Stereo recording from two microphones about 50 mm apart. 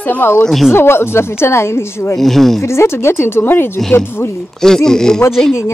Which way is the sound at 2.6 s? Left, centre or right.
Left.